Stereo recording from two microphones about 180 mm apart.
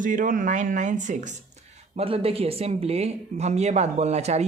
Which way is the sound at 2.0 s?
35° right (ahead or behind).